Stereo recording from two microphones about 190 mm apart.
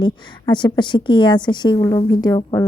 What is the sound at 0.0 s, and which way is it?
Speech, 25° left (ahead or behind).